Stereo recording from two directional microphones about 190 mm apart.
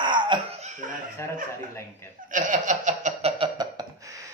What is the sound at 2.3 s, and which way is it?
Chuckle, 40° right (ahead or behind).